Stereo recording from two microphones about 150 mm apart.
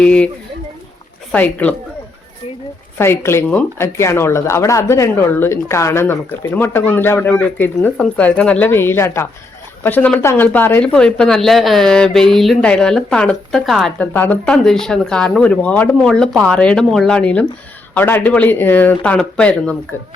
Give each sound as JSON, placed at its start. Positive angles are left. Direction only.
{"t": 0.0, "sound": "speech", "side_deg": 5}
{"t": 1.3, "sound": "speech", "side_deg": 10}
{"t": 3.0, "sound": "speech", "side_deg": 15}
{"t": 14.0, "sound": "speech", "side_deg": 10}